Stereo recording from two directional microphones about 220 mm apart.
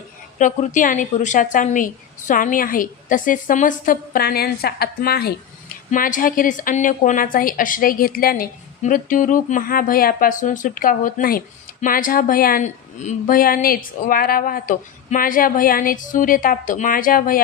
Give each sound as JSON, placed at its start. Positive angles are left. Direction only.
{"t": 0.3, "sound": "a woman's voice", "side_deg": 35}